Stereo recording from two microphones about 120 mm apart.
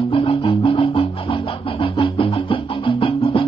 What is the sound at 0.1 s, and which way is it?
Music, 50° left (ahead or behind).